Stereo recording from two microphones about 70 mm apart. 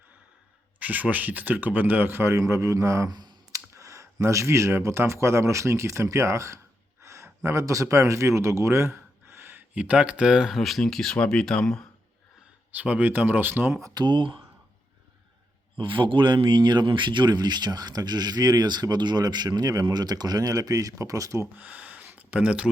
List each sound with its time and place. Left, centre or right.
0.8 s a man's voice: right
2.4 s a man's voice: right
3.1 s speech: right
3.5 s speech: right
7.0 s a sound: right
7.4 s speech: right
9.7 s speech: centre
10.6 s speech: centre
12.7 s a man's voice: right
13.9 s speech: right
15.8 s speech: right
21.6 s a sound: right